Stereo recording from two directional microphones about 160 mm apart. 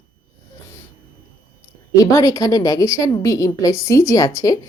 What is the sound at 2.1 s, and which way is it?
A woman's voice, 20° left (ahead or behind).